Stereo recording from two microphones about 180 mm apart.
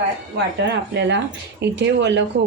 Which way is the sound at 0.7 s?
75° right (ahead or behind).